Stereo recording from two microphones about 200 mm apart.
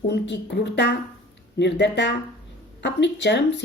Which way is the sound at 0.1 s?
60° left (ahead or behind).